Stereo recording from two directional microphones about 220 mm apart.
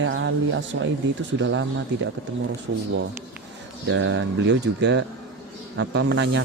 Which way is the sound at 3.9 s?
55° right (ahead or behind).